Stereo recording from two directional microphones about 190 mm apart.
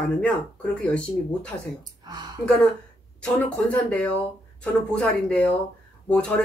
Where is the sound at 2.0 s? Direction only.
20° right (ahead or behind).